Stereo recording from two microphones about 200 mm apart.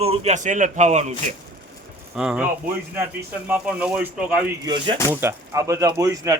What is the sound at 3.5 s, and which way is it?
Speech, 5° right (ahead or behind).